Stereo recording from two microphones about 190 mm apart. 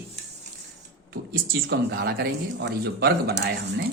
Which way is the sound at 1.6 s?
65° right (ahead or behind).